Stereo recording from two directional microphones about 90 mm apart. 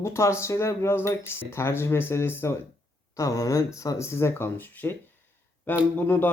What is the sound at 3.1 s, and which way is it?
Speech, 40° left (ahead or behind).